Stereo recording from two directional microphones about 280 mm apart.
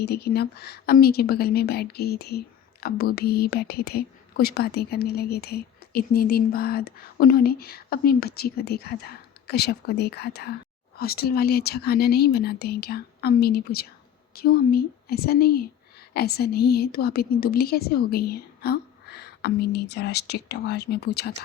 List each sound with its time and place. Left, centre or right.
0.0 s speech: left